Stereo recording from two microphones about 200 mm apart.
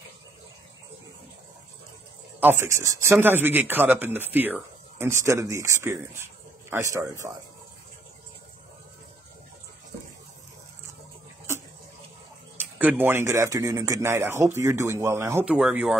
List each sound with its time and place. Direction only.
2.4 s speech: 15° right (ahead or behind)
12.7 s speech: 10° right (ahead or behind)